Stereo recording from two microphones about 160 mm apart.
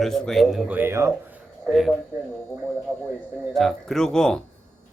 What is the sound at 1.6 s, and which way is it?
Speech, centre (ahead or behind).